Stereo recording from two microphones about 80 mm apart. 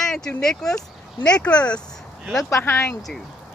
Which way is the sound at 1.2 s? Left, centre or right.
Left.